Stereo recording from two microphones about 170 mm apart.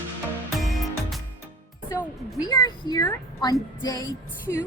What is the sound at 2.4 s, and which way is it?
Speech, 25° left (ahead or behind).